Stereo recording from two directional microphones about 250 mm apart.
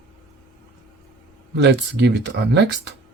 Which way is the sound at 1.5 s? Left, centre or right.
Right.